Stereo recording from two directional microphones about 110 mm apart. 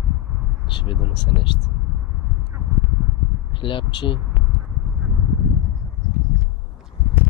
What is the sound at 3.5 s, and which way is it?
Speech, 50° left (ahead or behind).